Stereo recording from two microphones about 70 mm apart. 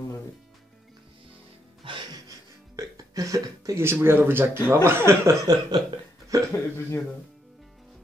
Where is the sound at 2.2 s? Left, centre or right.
Right.